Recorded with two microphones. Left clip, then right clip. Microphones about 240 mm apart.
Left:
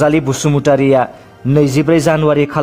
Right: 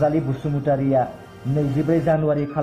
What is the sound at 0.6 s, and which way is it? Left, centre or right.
A man's voice, left.